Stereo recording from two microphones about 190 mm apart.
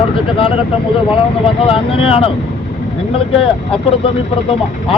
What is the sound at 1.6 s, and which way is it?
Speech, 30° left (ahead or behind).